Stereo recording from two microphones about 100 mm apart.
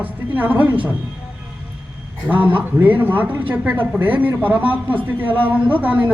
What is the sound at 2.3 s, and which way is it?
A man's voice, 15° right (ahead or behind).